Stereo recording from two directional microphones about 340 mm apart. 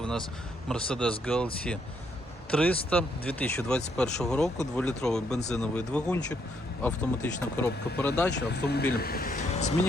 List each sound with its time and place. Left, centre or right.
0.0 s vehicle: centre
0.7 s speech: centre
2.5 s speech: centre
8.3 s speech: left